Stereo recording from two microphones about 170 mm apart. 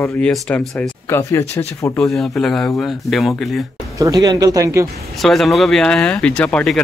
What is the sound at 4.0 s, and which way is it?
Speech, 20° right (ahead or behind).